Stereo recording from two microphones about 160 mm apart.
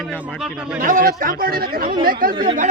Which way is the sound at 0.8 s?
60° right (ahead or behind).